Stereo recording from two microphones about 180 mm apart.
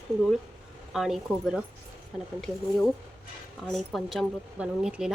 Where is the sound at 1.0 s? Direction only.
Centre (ahead or behind).